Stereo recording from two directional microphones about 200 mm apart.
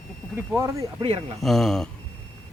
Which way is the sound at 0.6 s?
15° right (ahead or behind).